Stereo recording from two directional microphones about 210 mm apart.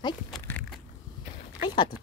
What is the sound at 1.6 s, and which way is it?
Speech, 20° left (ahead or behind).